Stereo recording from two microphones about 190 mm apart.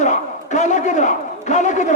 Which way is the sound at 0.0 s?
40° left (ahead or behind).